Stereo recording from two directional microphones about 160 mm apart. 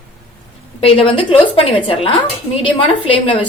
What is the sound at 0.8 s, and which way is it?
A woman's voice, 35° left (ahead or behind).